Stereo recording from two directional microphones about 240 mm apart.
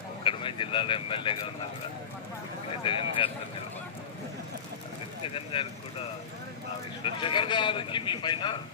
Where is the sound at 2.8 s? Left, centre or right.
Left.